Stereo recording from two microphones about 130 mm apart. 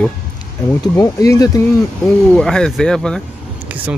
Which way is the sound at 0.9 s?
25° left (ahead or behind).